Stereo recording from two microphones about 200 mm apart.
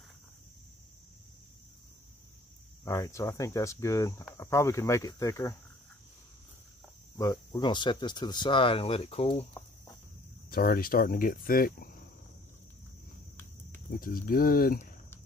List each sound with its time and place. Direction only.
2.8 s speech: 15° left (ahead or behind)
7.2 s speech: 20° left (ahead or behind)
10.5 s speech: 45° left (ahead or behind)
13.8 s speech: 45° left (ahead or behind)